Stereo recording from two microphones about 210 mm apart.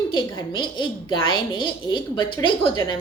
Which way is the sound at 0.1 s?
20° left (ahead or behind).